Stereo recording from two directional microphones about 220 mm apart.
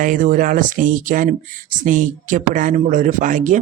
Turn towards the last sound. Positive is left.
turn(degrees=-35)  # may be behind; listen again after turning